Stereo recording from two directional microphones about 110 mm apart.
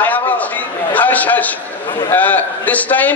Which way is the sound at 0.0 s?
15° left (ahead or behind).